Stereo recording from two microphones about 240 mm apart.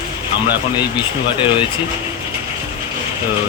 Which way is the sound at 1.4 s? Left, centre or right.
Left.